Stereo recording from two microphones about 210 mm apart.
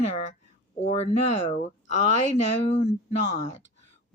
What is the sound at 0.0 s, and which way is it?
Speech, 35° left (ahead or behind).